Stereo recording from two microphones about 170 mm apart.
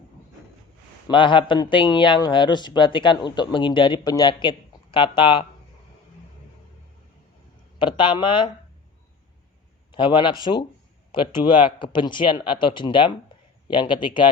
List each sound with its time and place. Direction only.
1.0 s a man's voice: 30° left (ahead or behind)
7.8 s a man's voice: 30° left (ahead or behind)
9.9 s a man's voice: 30° left (ahead or behind)